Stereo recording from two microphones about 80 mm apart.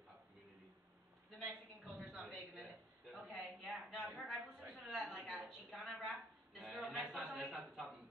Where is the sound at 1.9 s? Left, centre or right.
Centre.